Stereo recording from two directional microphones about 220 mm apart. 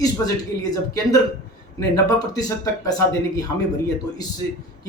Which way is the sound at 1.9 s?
15° left (ahead or behind).